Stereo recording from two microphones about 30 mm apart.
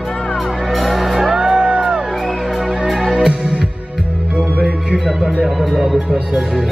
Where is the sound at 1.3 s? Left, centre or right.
Right.